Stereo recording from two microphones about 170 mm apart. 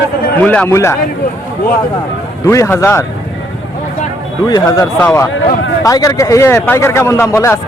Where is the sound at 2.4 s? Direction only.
15° left (ahead or behind).